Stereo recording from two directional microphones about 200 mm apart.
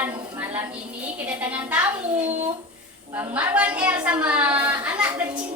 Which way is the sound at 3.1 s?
5° right (ahead or behind).